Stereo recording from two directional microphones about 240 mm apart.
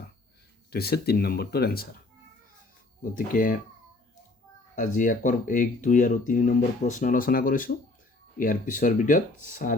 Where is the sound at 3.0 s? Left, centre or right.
Left.